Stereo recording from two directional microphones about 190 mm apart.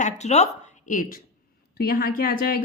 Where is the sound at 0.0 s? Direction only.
35° left (ahead or behind).